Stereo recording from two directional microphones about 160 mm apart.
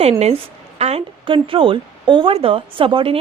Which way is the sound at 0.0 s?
40° right (ahead or behind).